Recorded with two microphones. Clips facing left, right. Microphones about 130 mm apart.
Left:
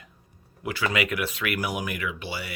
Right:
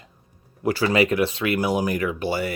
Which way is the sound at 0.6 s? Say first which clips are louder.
Right 7 dB; 35° right (ahead or behind).